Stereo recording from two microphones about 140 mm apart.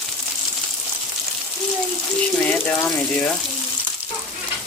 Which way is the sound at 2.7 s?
10° left (ahead or behind).